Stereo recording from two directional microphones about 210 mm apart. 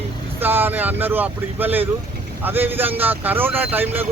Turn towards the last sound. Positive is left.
turn(degrees=-10)  # may be behind; listen again after turning